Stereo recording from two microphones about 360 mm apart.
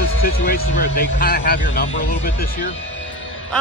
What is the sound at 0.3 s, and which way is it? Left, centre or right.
Speech, left.